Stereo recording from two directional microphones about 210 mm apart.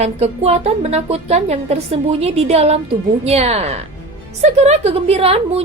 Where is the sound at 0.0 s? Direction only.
30° right (ahead or behind).